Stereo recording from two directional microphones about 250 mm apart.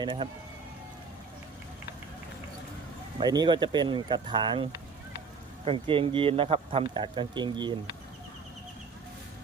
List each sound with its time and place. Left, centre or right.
0.0 s speech: centre
3.2 s speech: centre